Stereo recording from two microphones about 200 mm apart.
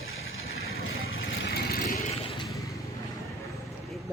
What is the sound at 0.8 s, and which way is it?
Vehicle, 70° left (ahead or behind).